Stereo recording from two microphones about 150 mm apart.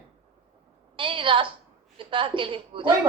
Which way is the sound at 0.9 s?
35° right (ahead or behind).